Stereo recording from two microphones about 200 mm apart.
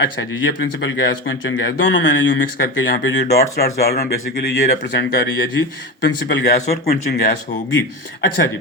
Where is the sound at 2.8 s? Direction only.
55° left (ahead or behind).